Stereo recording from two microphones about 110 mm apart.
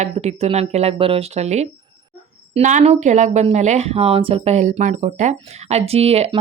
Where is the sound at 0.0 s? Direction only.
80° right.